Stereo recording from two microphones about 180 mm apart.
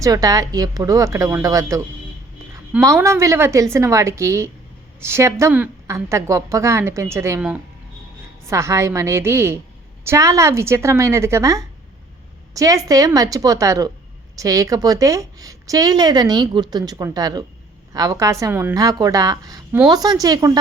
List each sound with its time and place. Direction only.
0.0 s a woman's voice: 20° right (ahead or behind)
8.4 s a woman's voice: 15° right (ahead or behind)